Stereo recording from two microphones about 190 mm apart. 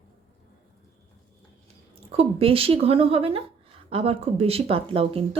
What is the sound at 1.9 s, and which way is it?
Speech, 30° right (ahead or behind).